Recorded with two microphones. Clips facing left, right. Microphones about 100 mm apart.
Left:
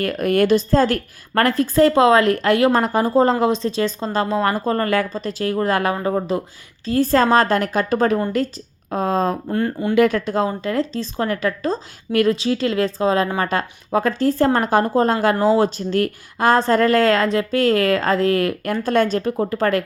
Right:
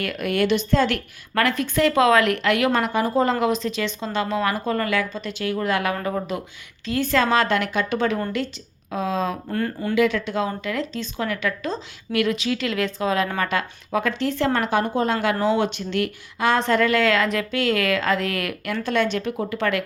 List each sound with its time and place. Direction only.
0.0 s a woman's voice: 40° left (ahead or behind)
9.5 s speech: 25° left (ahead or behind)
9.9 s a woman's voice: 45° left (ahead or behind)